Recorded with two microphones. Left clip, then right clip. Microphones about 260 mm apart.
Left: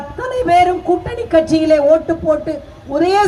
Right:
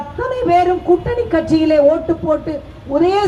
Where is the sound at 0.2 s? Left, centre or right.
Left.